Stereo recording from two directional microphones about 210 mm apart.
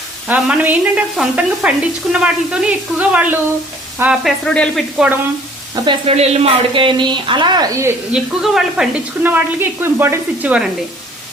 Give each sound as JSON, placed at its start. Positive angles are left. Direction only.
{"t": 0.3, "sound": "speech", "side_deg": -5}
{"t": 5.7, "sound": "speech", "side_deg": -20}